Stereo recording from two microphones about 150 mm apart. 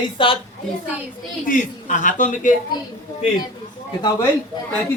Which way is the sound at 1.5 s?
60° left (ahead or behind).